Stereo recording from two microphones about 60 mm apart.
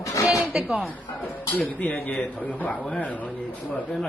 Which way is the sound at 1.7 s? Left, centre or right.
Left.